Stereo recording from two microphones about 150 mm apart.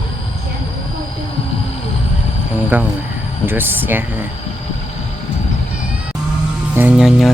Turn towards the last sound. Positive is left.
turn(degrees=-5)  # may be behind; listen again after turning